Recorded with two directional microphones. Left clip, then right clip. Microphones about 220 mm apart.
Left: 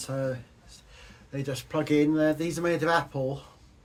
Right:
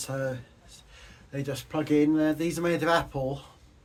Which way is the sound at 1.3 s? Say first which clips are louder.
Left 1 dB; centre (ahead or behind).